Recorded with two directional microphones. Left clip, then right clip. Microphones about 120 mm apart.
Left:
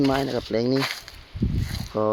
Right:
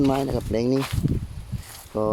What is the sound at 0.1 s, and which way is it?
Speech, 35° right (ahead or behind).